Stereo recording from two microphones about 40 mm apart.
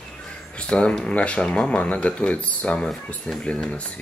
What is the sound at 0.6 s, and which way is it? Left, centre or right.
Speech, left.